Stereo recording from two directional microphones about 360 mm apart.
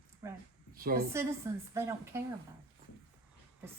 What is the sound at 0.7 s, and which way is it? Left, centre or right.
Speech, right.